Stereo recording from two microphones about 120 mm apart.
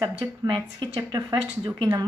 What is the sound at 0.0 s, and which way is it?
A woman's voice, 40° right (ahead or behind).